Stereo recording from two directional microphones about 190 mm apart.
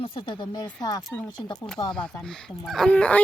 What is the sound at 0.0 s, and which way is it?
Speech, 25° left (ahead or behind).